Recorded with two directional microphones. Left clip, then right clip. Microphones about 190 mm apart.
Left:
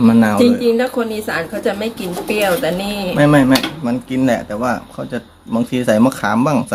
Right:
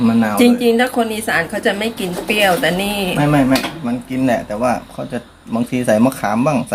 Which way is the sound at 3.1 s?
35° left (ahead or behind).